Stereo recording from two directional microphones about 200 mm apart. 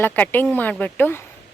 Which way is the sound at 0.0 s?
10° left (ahead or behind).